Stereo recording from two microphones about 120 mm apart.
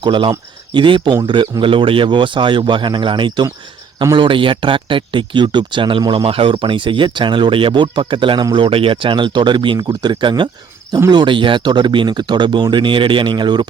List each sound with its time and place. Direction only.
0.0 s speech: 45° right (ahead or behind)